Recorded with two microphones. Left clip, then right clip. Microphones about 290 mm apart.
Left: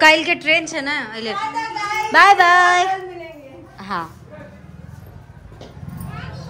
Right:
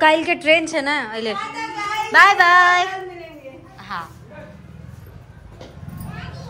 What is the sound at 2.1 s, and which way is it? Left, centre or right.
Music, centre.